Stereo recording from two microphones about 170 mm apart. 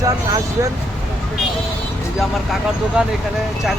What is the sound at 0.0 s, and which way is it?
Speech, 20° right (ahead or behind).